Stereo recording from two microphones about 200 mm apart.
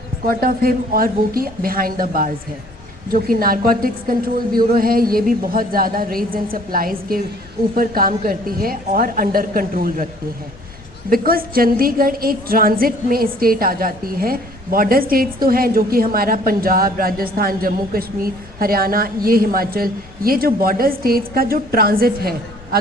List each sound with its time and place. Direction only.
0.3 s a woman's voice: 45° right (ahead or behind)
11.1 s a woman's voice: 45° right (ahead or behind)